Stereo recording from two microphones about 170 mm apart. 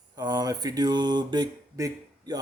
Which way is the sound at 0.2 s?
25° right (ahead or behind).